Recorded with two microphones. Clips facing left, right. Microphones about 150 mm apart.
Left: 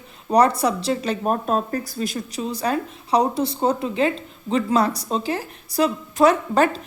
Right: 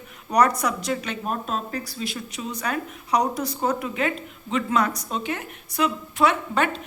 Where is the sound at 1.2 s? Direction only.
45° left (ahead or behind).